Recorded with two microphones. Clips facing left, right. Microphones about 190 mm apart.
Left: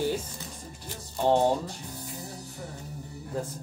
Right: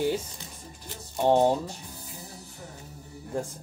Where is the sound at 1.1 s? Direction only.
10° right (ahead or behind).